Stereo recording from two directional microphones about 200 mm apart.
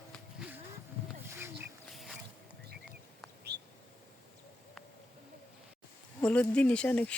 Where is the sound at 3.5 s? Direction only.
55° right (ahead or behind).